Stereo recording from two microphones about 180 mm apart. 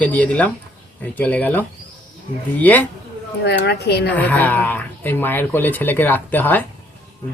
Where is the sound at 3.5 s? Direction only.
65° left (ahead or behind).